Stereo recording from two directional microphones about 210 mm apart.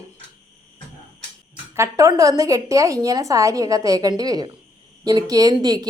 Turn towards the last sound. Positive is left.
turn(degrees=-20)  # may be behind; listen again after turning